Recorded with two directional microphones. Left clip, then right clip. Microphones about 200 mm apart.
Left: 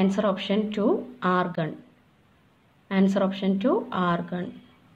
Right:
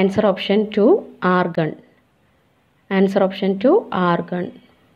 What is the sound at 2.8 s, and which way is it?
A woman's voice, 25° right (ahead or behind).